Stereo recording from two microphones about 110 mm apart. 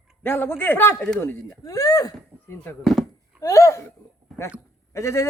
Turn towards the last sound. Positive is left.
turn(degrees=25)  # may be behind; listen again after turning